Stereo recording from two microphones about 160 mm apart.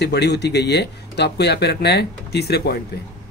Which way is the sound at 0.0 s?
90° left.